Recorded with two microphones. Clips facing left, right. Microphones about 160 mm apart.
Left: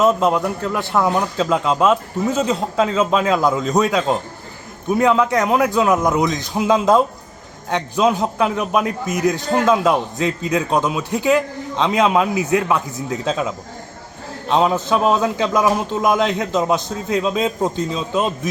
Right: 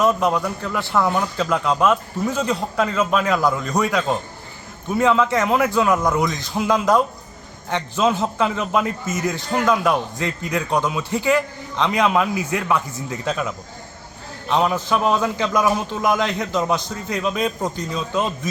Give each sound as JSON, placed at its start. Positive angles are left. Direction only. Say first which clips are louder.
{"t": 0.0, "sound": "a man's voice", "louder": "left 3 dB", "side_deg": 20}
{"t": 14.5, "sound": "a man's voice", "louder": "left 3 dB", "side_deg": 20}